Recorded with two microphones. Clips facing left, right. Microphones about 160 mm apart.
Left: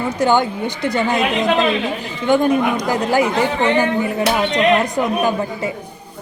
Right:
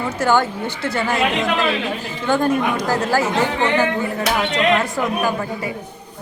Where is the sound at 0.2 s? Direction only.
15° left (ahead or behind).